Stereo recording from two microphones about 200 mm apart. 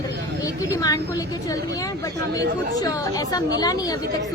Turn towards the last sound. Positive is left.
turn(degrees=20)  # may be behind; listen again after turning